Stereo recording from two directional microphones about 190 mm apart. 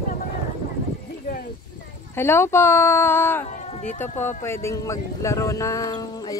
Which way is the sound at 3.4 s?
35° left (ahead or behind).